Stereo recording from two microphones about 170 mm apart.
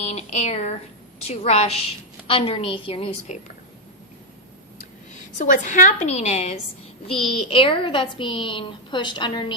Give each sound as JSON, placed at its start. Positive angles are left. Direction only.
{"t": 0.0, "sound": "a woman's voice", "side_deg": 40}
{"t": 5.4, "sound": "a woman's voice", "side_deg": 50}